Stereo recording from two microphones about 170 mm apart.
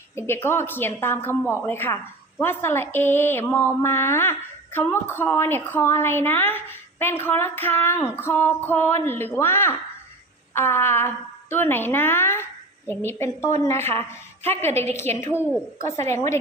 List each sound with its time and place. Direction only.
0.4 s speech: 15° left (ahead or behind)